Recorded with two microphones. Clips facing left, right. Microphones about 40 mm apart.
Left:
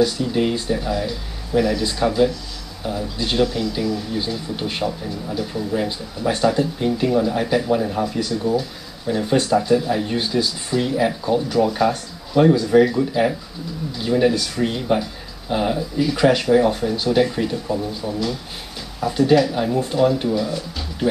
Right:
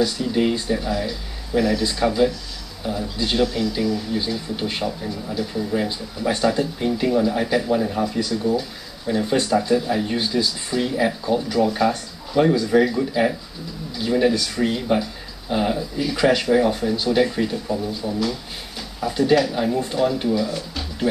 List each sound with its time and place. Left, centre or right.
0.0 s speech: centre
20.5 s speech: centre